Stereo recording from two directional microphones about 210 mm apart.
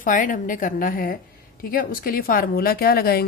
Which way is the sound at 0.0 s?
40° left (ahead or behind).